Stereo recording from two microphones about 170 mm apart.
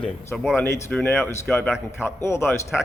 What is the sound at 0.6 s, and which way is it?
Speech, 15° left (ahead or behind).